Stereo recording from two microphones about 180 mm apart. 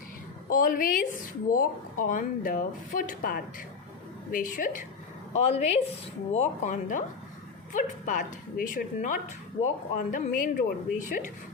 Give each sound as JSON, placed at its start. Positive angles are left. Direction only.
{"t": 0.5, "sound": "a woman's voice", "side_deg": 50}
{"t": 5.3, "sound": "a woman's voice", "side_deg": 35}